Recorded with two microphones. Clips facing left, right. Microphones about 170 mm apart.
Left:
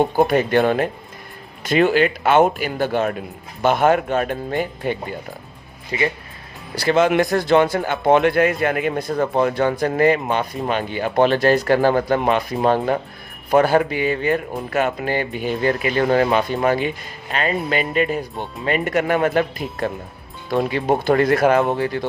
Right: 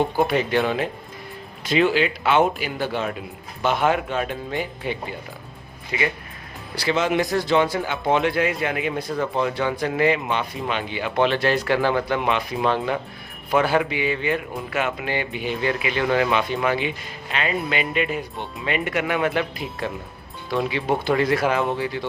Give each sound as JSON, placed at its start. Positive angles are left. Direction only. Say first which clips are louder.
{"t": 0.2, "sound": "speech", "louder": "left 6 dB", "side_deg": 45}
{"t": 5.9, "sound": "speech", "louder": "left 3 dB", "side_deg": 35}
{"t": 6.7, "sound": "speech", "louder": "left 5 dB", "side_deg": 50}